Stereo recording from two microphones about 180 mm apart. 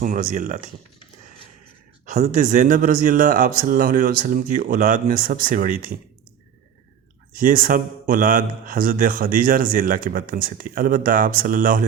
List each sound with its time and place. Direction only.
0.0 s speech: 45° right (ahead or behind)
2.0 s speech: 45° right (ahead or behind)
7.3 s speech: 50° right (ahead or behind)